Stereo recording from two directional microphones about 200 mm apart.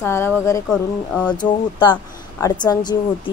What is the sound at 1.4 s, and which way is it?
Speech, 25° left (ahead or behind).